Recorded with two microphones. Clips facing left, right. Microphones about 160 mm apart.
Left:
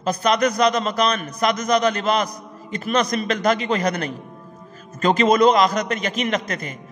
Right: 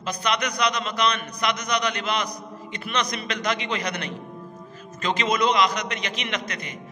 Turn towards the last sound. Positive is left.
turn(degrees=45)  # may be behind; listen again after turning